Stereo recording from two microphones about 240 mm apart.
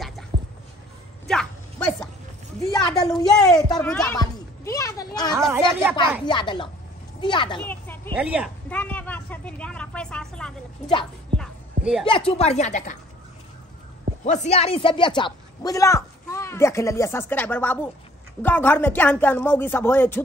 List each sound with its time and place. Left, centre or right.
1.2 s a sound: centre
3.2 s speech: centre
3.8 s speech: centre
4.2 s a sound: centre
5.5 s speech: centre
6.2 s speech: centre
7.6 s a sound: centre
8.2 s speech: centre
8.6 s a woman's voice: centre
11.3 s music: centre
12.0 s speech: left
14.2 s speech: left; by 20.2 s centre